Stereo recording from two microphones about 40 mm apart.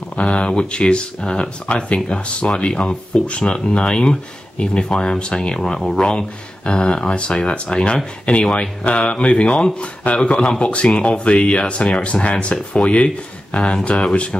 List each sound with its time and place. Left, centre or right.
0.1 s speech: left
5.6 s speech: centre; by 13.6 s left
13.6 s speech: centre
13.8 s speech: left